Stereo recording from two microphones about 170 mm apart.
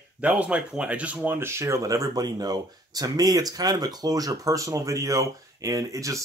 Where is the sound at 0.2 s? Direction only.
10° right (ahead or behind).